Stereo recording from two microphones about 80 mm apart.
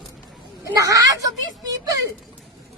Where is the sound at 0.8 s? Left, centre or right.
Right.